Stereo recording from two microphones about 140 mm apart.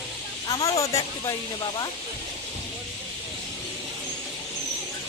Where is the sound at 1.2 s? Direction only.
30° left (ahead or behind).